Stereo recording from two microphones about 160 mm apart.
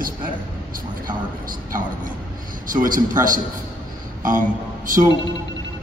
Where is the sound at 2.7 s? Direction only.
60° right (ahead or behind).